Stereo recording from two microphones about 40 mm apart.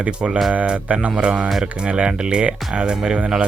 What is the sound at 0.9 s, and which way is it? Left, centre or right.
Speech, right.